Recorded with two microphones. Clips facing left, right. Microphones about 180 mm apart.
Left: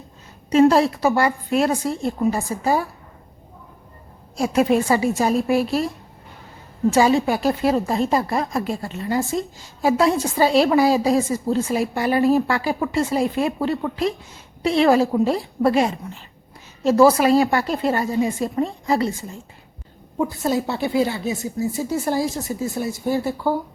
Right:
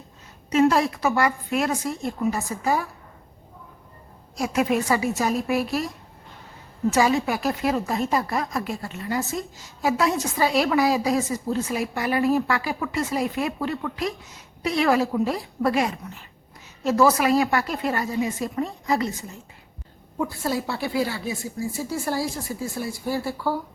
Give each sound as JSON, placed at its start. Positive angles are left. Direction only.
{"t": 0.5, "sound": "a woman's voice", "side_deg": 30}
{"t": 4.4, "sound": "speech", "side_deg": 30}
{"t": 6.9, "sound": "speech", "side_deg": 30}
{"t": 20.1, "sound": "speech", "side_deg": 20}